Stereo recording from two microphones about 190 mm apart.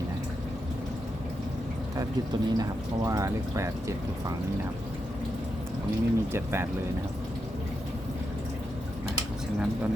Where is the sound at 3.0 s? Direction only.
15° right (ahead or behind).